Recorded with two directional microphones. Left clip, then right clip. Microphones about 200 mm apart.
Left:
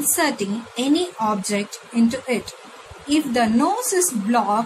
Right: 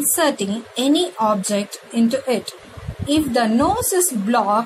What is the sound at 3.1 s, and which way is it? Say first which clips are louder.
Speech: right 2 dB; 15° right (ahead or behind).